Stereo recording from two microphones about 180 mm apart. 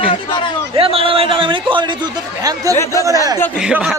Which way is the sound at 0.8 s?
30° right (ahead or behind).